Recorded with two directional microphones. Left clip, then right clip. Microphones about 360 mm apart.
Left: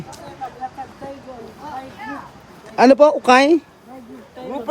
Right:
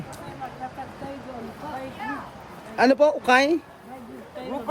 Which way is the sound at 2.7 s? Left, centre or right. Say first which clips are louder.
Left 7 dB; centre.